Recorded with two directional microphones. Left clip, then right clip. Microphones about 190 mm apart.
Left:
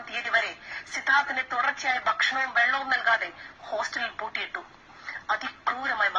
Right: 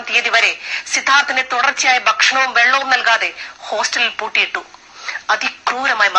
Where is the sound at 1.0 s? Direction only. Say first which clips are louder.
Right 10 dB; 30° right (ahead or behind).